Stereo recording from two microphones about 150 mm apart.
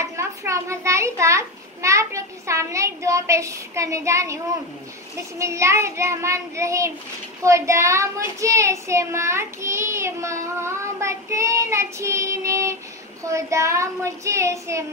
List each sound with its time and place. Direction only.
0.0 s child singing: 20° right (ahead or behind)
5.4 s child singing: 20° right (ahead or behind)